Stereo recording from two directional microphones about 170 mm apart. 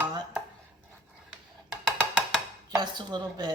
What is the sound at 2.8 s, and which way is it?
Speech, 25° right (ahead or behind).